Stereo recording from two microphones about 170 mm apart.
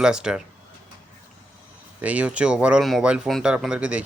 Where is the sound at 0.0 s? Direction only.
5° right (ahead or behind).